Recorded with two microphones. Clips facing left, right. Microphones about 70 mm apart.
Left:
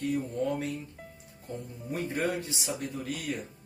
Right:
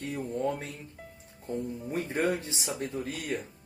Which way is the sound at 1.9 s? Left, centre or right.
Right.